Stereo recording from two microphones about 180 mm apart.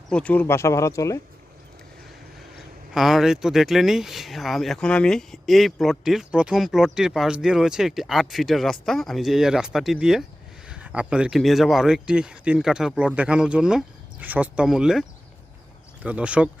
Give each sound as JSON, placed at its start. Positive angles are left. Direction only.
{"t": 0.1, "sound": "speech", "side_deg": 5}
{"t": 2.9, "sound": "speech", "side_deg": 0}
{"t": 16.0, "sound": "speech", "side_deg": -5}